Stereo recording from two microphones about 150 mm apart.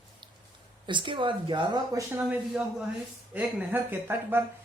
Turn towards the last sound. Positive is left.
turn(degrees=-15)  # may be behind; listen again after turning